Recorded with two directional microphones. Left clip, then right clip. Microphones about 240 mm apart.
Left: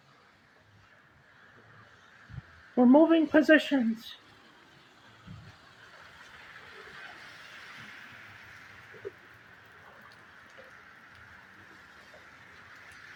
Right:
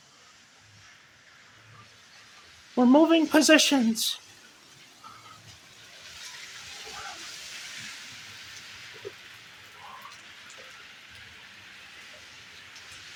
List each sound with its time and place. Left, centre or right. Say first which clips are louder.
2.7 s speech: right 1 dB; centre